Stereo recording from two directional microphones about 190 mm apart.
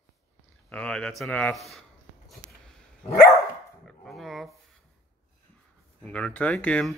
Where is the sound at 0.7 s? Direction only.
5° left (ahead or behind).